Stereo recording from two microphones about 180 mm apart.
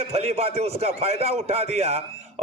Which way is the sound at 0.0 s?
35° right (ahead or behind).